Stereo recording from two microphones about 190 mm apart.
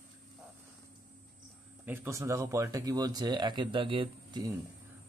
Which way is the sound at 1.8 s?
10° right (ahead or behind).